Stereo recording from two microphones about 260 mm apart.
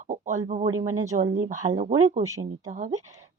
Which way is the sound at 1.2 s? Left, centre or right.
Right.